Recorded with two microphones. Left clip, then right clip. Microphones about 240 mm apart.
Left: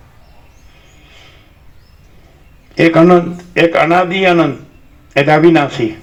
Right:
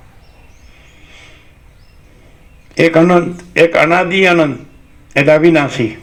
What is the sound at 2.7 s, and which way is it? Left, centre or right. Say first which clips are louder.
Speech: left 1 dB; right.